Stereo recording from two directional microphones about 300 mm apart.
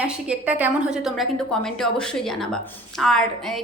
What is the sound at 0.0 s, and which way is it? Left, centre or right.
A woman's voice, centre.